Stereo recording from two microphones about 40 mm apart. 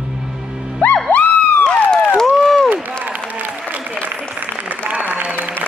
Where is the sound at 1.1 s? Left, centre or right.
Left.